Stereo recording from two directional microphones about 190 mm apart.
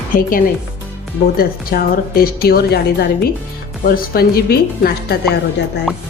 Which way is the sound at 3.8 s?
50° left (ahead or behind).